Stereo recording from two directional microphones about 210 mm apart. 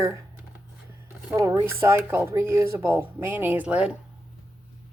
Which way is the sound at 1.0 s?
15° right (ahead or behind).